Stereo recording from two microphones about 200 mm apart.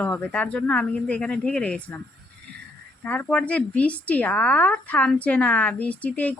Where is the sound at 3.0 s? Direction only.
10° left (ahead or behind).